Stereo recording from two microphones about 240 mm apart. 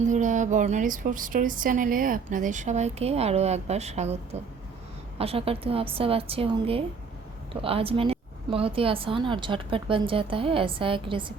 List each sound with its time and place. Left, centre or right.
0.0 s speech: right